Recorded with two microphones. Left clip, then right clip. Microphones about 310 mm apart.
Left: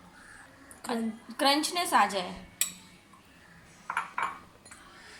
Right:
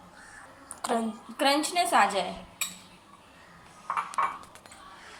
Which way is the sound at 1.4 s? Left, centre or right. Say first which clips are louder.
Right 2 dB; centre.